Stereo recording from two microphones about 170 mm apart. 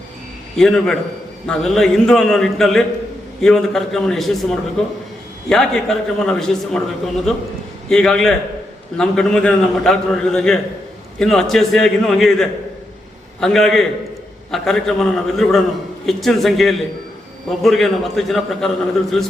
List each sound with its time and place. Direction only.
0.5 s a man's voice: centre (ahead or behind)
5.5 s a man's voice: 5° left (ahead or behind)